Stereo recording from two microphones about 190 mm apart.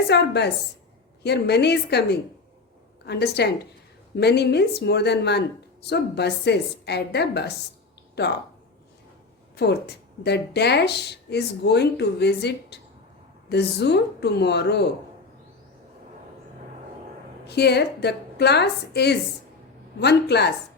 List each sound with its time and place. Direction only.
0.1 s a woman's voice: 60° left (ahead or behind)
9.6 s a woman's voice: 60° left (ahead or behind)
17.4 s a woman's voice: 60° left (ahead or behind)